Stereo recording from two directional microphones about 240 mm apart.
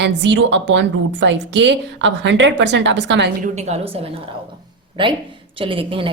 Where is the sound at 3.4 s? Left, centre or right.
Right.